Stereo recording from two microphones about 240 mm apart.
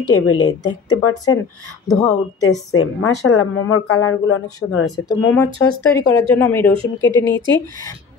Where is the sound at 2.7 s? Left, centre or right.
Left.